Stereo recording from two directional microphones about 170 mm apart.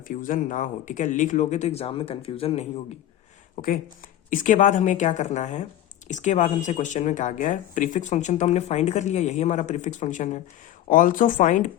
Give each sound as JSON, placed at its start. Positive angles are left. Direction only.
{"t": 0.1, "sound": "speech", "side_deg": 50}
{"t": 3.6, "sound": "speech", "side_deg": 50}